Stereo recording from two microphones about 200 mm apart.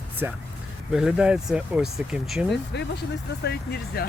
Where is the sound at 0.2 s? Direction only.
10° right (ahead or behind).